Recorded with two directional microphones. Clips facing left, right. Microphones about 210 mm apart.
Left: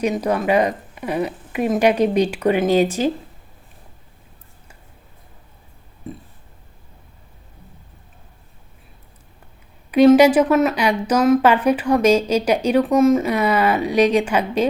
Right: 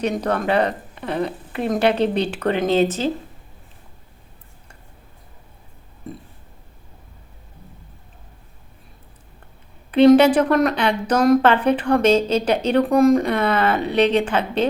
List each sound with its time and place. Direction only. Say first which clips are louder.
0.0 s speech: left 2 dB; 10° left (ahead or behind)
9.9 s speech: left 1 dB; 10° left (ahead or behind)